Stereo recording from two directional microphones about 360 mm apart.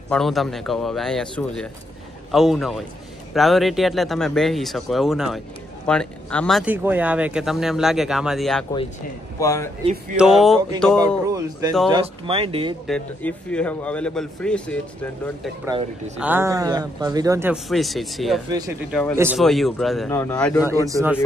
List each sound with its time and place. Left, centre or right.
0.1 s speech: centre
11.9 s speech: centre
12.8 s speech: centre
20.8 s speech: centre